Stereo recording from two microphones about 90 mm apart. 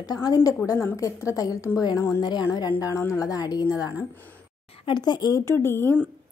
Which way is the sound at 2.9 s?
40° left (ahead or behind).